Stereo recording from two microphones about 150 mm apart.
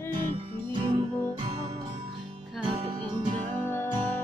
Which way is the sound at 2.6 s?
35° right (ahead or behind).